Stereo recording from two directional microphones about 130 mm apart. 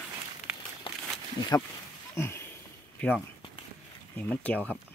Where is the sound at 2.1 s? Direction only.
20° left (ahead or behind).